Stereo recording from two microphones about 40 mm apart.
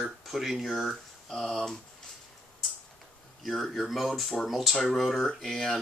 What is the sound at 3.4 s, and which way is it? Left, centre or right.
Speech, centre.